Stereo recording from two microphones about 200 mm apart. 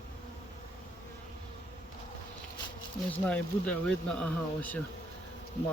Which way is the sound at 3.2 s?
5° left (ahead or behind).